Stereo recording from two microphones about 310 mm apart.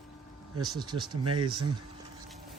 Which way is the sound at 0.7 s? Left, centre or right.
Centre.